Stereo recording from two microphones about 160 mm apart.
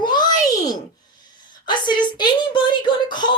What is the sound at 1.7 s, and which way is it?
A woman's voice, 30° left (ahead or behind).